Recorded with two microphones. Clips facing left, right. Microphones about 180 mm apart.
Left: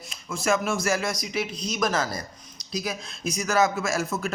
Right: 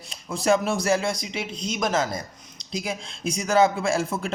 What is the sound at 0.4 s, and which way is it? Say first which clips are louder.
Speech: right 3 dB; 35° right (ahead or behind).